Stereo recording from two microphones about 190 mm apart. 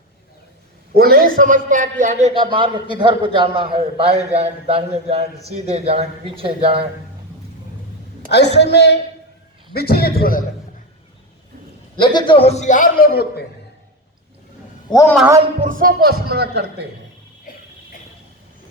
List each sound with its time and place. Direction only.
0.9 s a man's voice: 50° right (ahead or behind)
2.3 s a man's voice: 25° right (ahead or behind)
8.3 s a woman's voice: 65° left (ahead or behind)
11.9 s a man's voice: 25° left (ahead or behind); by 13.4 s 50° left (ahead or behind)
14.8 s a man's voice: 20° left (ahead or behind)
15.6 s a man's voice: 45° right (ahead or behind)